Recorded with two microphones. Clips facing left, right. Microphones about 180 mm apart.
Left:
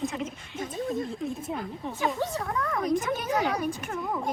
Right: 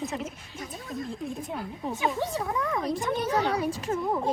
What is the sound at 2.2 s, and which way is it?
Speech, 20° right (ahead or behind).